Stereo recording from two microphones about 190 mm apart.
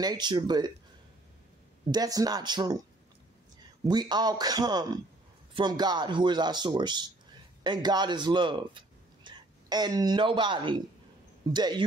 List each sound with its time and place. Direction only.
0.0 s speech: 20° right (ahead or behind)
1.9 s speech: 20° right (ahead or behind)
3.8 s speech: 20° right (ahead or behind)